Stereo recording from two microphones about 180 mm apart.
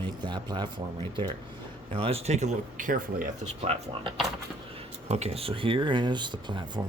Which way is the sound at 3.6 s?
35° right (ahead or behind).